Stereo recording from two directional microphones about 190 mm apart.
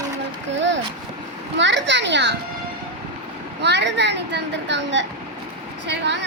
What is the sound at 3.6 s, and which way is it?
A child's voice, 65° right (ahead or behind).